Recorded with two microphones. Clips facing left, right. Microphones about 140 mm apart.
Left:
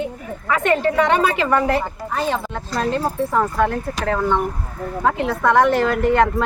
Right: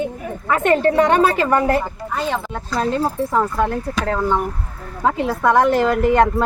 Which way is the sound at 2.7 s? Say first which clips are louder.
Right 1 dB; 5° right (ahead or behind).